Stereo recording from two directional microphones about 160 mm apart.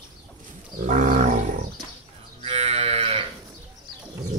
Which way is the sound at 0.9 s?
55° right (ahead or behind).